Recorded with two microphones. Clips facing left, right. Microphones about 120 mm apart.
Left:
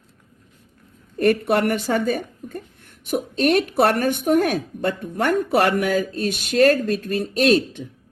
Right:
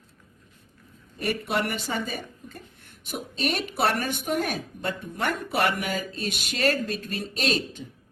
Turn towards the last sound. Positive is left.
turn(degrees=50)  # may be behind; listen again after turning